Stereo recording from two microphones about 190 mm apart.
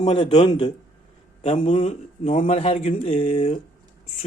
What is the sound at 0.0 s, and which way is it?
A man's voice, 30° left (ahead or behind).